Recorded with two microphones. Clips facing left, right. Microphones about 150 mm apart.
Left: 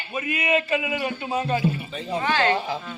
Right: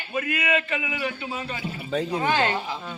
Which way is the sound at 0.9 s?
40° left (ahead or behind).